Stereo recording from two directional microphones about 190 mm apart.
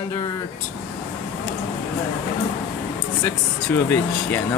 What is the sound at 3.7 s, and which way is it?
Speech, 10° left (ahead or behind).